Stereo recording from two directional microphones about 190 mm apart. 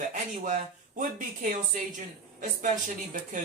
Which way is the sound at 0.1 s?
45° right (ahead or behind).